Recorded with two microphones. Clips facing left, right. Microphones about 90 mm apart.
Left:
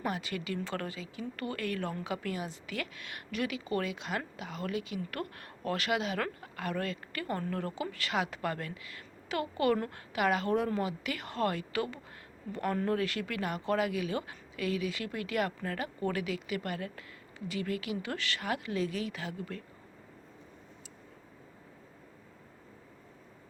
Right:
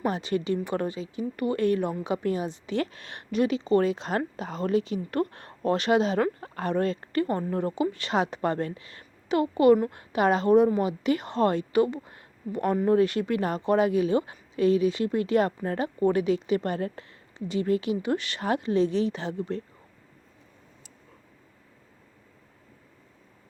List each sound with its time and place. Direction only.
0.0 s a woman's voice: 25° right (ahead or behind)